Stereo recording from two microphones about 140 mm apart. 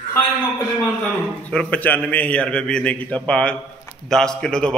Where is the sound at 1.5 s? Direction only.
10° left (ahead or behind).